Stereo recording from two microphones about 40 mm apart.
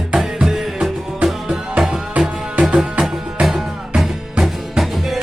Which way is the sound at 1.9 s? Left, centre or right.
Right.